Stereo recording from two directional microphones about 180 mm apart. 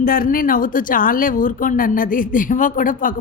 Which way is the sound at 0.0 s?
55° left (ahead or behind).